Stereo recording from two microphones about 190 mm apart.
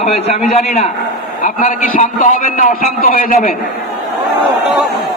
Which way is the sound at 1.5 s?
45° left (ahead or behind).